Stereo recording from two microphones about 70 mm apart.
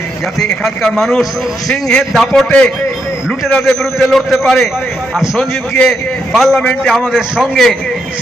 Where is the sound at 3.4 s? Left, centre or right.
Centre.